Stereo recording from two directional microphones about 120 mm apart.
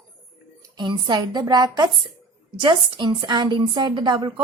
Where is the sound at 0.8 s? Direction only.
40° right (ahead or behind).